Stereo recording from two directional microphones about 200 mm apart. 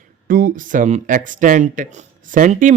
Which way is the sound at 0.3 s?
45° right (ahead or behind).